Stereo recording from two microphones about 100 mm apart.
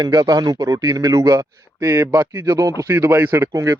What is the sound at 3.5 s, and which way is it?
Speech, 35° right (ahead or behind).